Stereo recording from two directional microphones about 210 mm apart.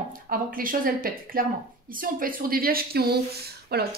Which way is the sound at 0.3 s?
40° right (ahead or behind).